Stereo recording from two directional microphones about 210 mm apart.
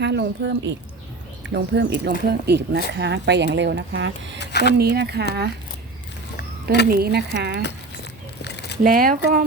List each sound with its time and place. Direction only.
0.0 s speech: 55° right (ahead or behind)
4.4 s a sound: 55° left (ahead or behind)
4.8 s speech: 50° right (ahead or behind)
6.8 s speech: 45° right (ahead or behind)
8.4 s a sound: 55° left (ahead or behind)
8.8 s speech: 45° right (ahead or behind)